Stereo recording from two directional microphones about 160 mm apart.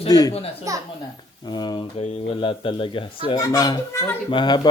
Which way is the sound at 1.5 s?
25° left (ahead or behind).